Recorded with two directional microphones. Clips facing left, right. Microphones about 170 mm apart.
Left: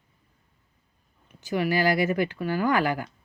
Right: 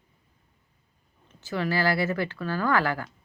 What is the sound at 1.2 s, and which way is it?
Speech, 15° left (ahead or behind).